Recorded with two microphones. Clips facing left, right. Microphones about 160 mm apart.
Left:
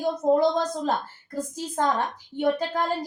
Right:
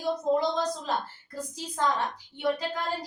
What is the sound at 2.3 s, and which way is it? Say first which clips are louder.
Speech: left 5 dB; 50° left (ahead or behind).